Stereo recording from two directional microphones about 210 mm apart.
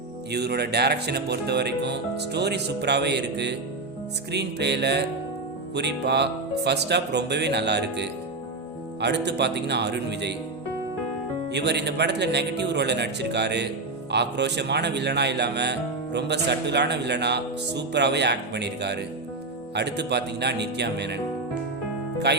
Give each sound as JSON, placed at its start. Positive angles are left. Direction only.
{"t": 0.3, "sound": "speech", "side_deg": -50}
{"t": 11.5, "sound": "speech", "side_deg": -55}
{"t": 22.3, "sound": "speech", "side_deg": -55}